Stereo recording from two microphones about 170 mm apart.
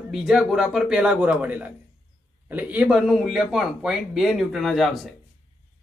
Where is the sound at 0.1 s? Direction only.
Centre (ahead or behind).